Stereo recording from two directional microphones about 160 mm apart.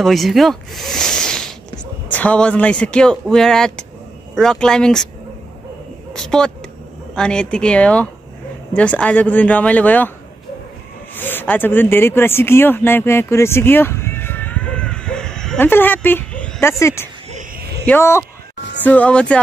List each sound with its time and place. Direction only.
0.0 s speech: centre (ahead or behind)
6.1 s speech: 5° left (ahead or behind)
11.1 s speech: 10° left (ahead or behind)